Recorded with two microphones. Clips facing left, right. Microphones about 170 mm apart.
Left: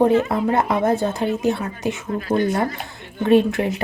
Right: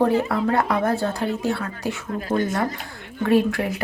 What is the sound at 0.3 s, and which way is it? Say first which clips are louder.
Speech: left 2 dB; 20° left (ahead or behind).